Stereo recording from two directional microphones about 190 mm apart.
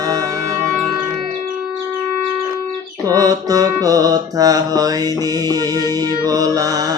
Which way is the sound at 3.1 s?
20° right (ahead or behind).